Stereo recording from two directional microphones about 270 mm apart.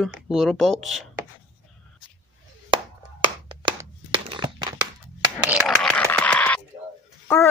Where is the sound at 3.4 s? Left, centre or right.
Centre.